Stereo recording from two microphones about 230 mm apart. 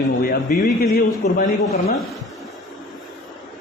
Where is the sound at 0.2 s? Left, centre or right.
Left.